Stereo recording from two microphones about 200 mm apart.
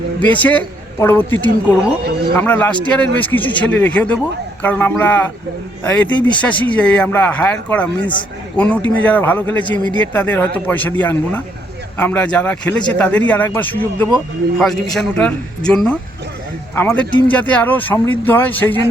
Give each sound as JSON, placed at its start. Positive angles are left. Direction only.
{"t": 0.2, "sound": "a man's voice", "side_deg": 10}